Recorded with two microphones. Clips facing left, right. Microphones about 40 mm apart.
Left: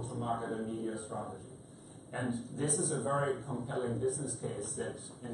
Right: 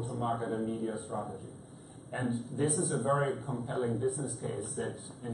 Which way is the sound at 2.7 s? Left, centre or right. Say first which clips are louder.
Right 2 dB; centre.